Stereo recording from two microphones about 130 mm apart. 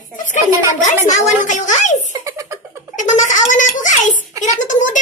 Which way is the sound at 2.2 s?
25° right (ahead or behind).